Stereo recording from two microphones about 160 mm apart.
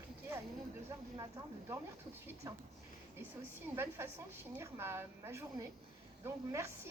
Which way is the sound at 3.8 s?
15° right (ahead or behind).